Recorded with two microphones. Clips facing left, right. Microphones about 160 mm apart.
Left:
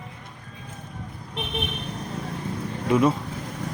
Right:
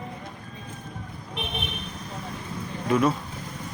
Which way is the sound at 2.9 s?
20° left (ahead or behind).